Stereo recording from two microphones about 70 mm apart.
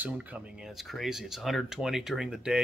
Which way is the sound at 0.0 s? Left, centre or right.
Right.